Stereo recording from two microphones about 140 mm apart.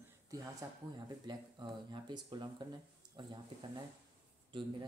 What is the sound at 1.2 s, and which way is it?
Speech, 30° right (ahead or behind).